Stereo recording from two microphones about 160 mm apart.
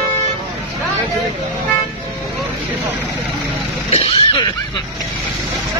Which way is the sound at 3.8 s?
40° left (ahead or behind).